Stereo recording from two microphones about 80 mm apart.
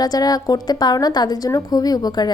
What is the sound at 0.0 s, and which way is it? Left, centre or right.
A woman's voice, left.